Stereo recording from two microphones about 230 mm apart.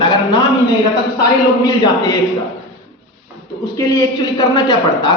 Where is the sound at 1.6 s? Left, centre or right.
Centre.